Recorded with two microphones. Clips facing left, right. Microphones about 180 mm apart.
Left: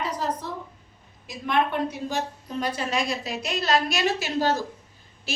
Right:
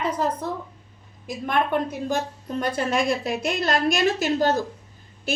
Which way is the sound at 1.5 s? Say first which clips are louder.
Right 1 dB; 50° right (ahead or behind).